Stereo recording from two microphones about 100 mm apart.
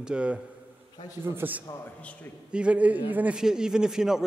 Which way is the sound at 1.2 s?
20° right (ahead or behind).